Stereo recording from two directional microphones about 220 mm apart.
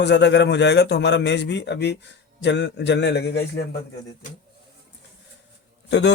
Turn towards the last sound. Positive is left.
turn(degrees=50)  # may be behind; listen again after turning